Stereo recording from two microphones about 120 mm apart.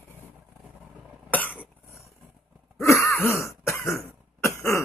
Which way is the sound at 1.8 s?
25° left (ahead or behind).